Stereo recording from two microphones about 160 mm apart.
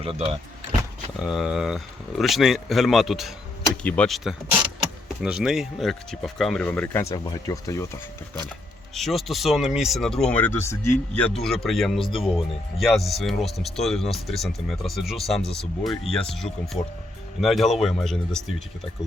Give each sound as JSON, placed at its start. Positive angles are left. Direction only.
{"t": 0.0, "sound": "speech", "side_deg": -35}
{"t": 1.2, "sound": "speech", "side_deg": -5}
{"t": 9.0, "sound": "speech", "side_deg": 0}
{"t": 11.3, "sound": "speech", "side_deg": 0}